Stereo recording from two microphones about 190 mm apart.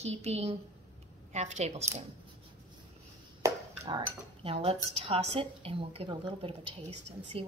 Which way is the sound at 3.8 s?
30° right (ahead or behind).